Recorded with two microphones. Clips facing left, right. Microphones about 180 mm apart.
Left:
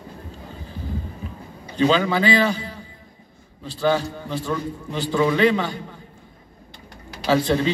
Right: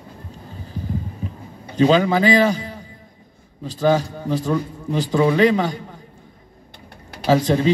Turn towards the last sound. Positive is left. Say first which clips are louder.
# right 2 dB
turn(degrees=-40)  # may be behind; listen again after turning